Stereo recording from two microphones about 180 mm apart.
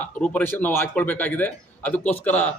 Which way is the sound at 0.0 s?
10° left (ahead or behind).